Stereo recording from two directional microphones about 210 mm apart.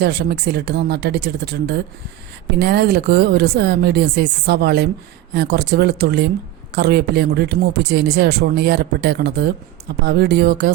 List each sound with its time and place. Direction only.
0.0 s speech: 50° right (ahead or behind)